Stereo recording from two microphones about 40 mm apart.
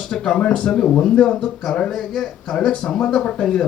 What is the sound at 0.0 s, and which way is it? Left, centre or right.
Speech, centre.